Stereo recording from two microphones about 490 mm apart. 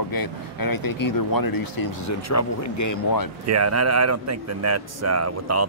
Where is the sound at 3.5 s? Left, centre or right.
Right.